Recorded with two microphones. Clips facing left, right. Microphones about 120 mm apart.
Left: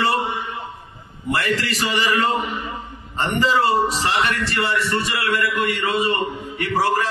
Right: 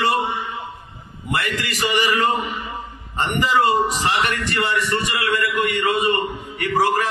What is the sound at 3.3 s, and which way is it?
A man's voice, 15° right (ahead or behind).